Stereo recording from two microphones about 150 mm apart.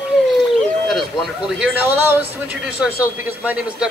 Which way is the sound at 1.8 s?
15° right (ahead or behind).